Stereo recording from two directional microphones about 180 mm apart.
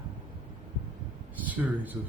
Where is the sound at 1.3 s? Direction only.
10° right (ahead or behind).